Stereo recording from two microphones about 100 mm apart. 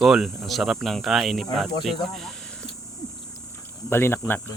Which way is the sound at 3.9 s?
20° left (ahead or behind).